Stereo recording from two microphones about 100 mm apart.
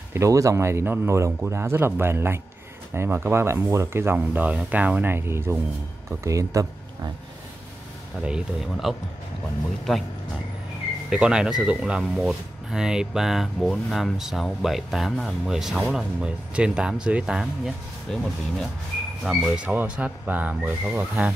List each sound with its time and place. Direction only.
0.1 s speech: 30° right (ahead or behind)
8.3 s speech: 5° right (ahead or behind)
11.1 s speech: 10° right (ahead or behind)